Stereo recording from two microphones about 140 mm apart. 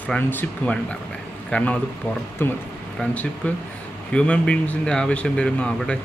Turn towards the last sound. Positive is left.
turn(degrees=5)  # may be behind; listen again after turning